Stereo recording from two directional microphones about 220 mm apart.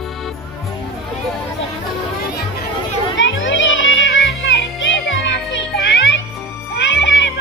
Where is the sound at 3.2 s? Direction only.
60° left (ahead or behind).